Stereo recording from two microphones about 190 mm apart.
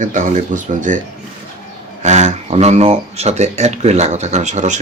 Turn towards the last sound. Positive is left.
turn(degrees=-40)  # may be behind; listen again after turning